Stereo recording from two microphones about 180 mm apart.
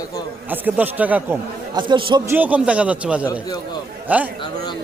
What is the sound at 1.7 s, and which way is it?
Speech, 25° right (ahead or behind).